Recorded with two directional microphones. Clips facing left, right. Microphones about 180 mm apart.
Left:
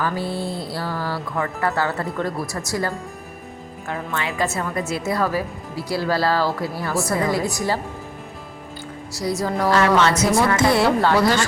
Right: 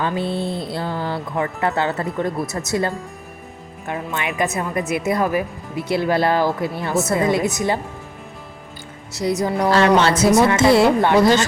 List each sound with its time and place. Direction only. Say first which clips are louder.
0.0 s speech: right 2 dB; 20° right (ahead or behind)
9.1 s speech: right 3 dB; 20° right (ahead or behind)